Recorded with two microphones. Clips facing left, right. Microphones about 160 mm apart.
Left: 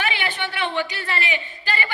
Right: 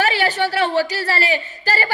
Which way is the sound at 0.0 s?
40° right (ahead or behind).